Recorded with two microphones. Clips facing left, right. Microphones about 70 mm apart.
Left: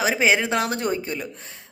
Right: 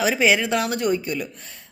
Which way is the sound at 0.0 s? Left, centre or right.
Left.